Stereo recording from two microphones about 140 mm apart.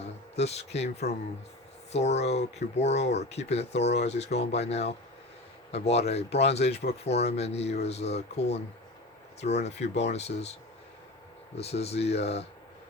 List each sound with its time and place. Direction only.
0.0 s speech: 50° left (ahead or behind)